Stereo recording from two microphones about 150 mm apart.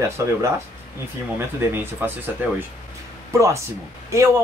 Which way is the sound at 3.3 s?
20° right (ahead or behind).